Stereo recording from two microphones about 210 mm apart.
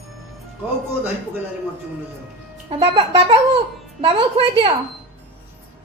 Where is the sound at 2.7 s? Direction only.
25° right (ahead or behind).